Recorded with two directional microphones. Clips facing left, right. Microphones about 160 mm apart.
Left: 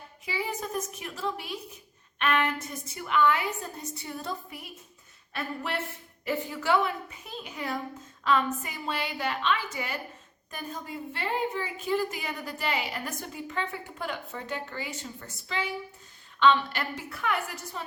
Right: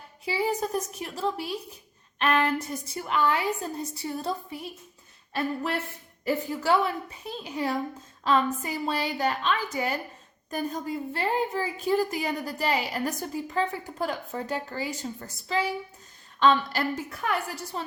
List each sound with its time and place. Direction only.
0.3 s a woman's voice: 35° right (ahead or behind)
6.2 s a woman's voice: 35° right (ahead or behind)